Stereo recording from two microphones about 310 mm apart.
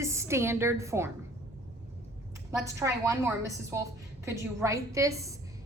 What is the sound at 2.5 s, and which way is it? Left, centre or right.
A woman's voice, centre.